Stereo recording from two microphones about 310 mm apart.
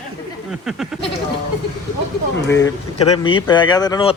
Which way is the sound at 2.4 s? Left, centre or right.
Left.